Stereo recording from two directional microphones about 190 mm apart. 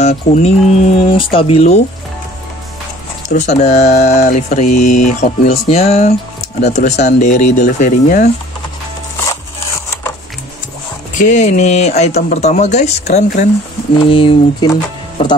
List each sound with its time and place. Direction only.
0.0 s speech: 35° left (ahead or behind)
3.3 s speech: 40° left (ahead or behind)
9.3 s a sound: 15° left (ahead or behind)
11.1 s speech: 40° left (ahead or behind)
14.0 s speech: 25° left (ahead or behind)